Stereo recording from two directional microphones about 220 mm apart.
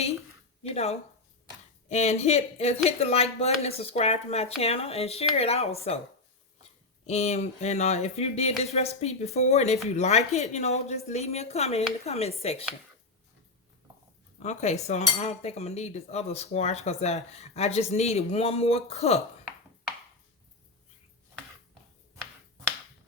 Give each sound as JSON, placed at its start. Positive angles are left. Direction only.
{"t": 0.7, "sound": "cutlery", "side_deg": 30}
{"t": 7.1, "sound": "cutlery", "side_deg": 30}
{"t": 14.3, "sound": "cutlery", "side_deg": 30}